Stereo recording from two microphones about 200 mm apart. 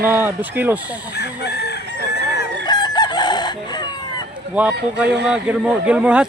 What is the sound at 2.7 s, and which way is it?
Chicken, 20° left (ahead or behind).